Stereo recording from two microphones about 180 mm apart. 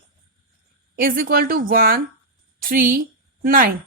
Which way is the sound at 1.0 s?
50° right (ahead or behind).